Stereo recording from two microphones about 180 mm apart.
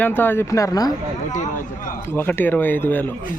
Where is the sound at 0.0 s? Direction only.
10° left (ahead or behind).